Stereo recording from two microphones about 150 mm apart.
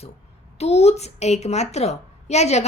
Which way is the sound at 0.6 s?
45° left (ahead or behind).